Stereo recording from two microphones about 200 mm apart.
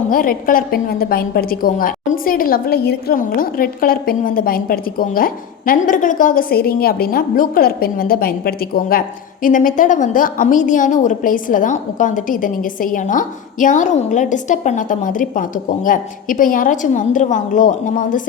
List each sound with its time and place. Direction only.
0.1 s a woman's voice: 45° left (ahead or behind)